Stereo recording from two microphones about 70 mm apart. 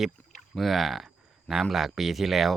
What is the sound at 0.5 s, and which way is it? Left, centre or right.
Speech, centre.